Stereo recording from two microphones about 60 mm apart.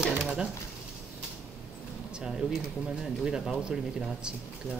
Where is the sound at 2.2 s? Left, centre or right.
Centre.